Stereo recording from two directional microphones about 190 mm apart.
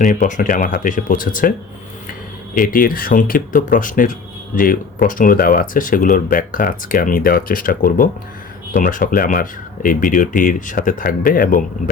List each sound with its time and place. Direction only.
0.0 s speech: 40° left (ahead or behind)
2.6 s speech: 45° left (ahead or behind)